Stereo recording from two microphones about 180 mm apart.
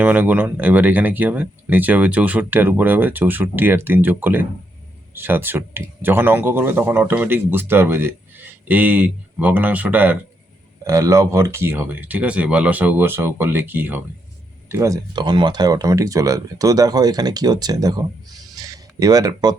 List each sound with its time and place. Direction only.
0.0 s speech: 10° right (ahead or behind)